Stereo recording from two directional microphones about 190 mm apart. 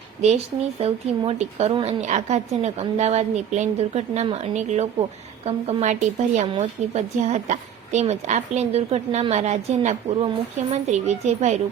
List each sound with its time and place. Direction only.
0.8 s speech: 30° right (ahead or behind)